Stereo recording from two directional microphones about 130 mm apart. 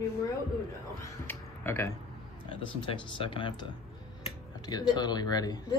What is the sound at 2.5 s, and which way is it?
Speech, 40° left (ahead or behind).